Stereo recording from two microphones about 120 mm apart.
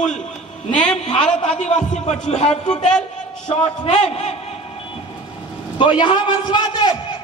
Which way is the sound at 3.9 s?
65° left (ahead or behind).